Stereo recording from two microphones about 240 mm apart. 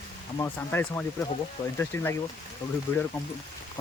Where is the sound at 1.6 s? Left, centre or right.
Left.